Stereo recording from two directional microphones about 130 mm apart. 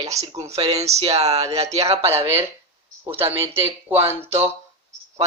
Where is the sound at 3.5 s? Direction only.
20° right (ahead or behind).